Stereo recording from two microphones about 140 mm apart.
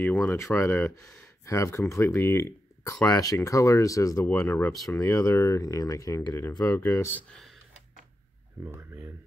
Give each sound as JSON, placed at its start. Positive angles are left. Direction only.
{"t": 0.0, "sound": "speech", "side_deg": 15}
{"t": 8.6, "sound": "speech", "side_deg": -15}